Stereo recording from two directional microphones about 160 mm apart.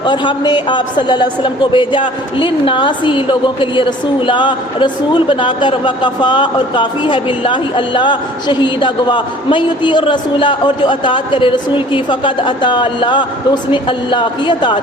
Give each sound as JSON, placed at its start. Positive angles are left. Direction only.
{"t": 0.0, "sound": "a woman's voice", "side_deg": 30}